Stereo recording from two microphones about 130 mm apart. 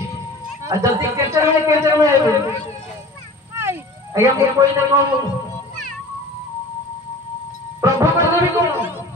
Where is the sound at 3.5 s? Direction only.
20° right (ahead or behind).